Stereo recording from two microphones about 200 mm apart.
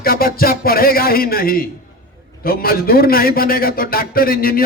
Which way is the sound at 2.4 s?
50° left (ahead or behind).